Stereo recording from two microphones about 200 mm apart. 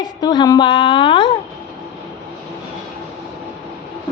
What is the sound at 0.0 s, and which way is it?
A woman's voice, 20° left (ahead or behind).